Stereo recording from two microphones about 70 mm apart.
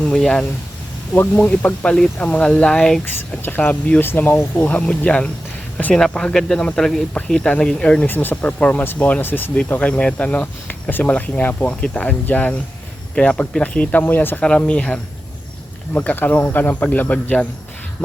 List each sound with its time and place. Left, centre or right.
0.0 s speech: centre
3.0 s speech: left
4.8 s speech: centre
8.0 s speech: left
8.4 s speech: centre
14.4 s speech: centre